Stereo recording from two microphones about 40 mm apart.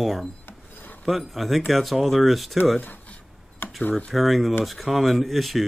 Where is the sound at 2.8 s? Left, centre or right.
Left.